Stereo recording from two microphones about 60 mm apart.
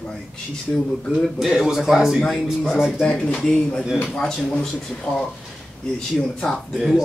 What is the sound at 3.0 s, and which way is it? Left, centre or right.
A man's voice, centre.